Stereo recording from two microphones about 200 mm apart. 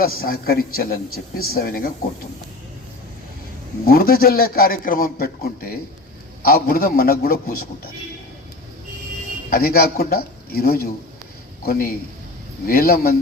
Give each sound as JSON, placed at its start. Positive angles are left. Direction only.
{"t": 0.2, "sound": "a man's voice", "side_deg": 50}
{"t": 3.8, "sound": "a man's voice", "side_deg": 45}
{"t": 9.5, "sound": "a man's voice", "side_deg": 50}